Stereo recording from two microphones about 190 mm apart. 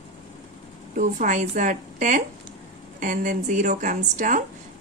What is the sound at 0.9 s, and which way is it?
A woman's voice, 40° right (ahead or behind).